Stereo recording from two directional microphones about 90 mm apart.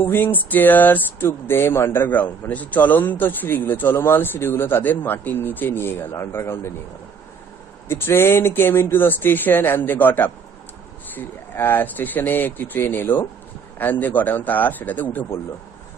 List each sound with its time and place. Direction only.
0.0 s speech: 20° left (ahead or behind)
7.9 s speech: 25° left (ahead or behind)